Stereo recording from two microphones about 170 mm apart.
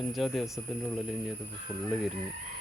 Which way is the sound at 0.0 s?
Centre (ahead or behind).